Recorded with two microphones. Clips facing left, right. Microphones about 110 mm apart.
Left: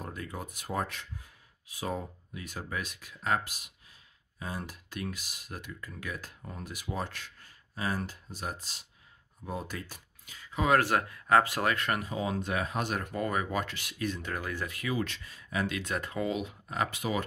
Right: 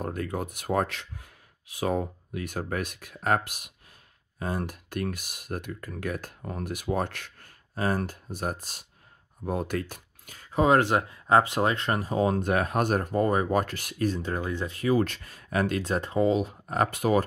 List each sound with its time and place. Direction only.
0.0 s speech: 55° right (ahead or behind)
10.6 s speech: 25° right (ahead or behind)
12.1 s speech: 45° right (ahead or behind)
15.8 s speech: 30° right (ahead or behind)
16.6 s speech: 45° right (ahead or behind)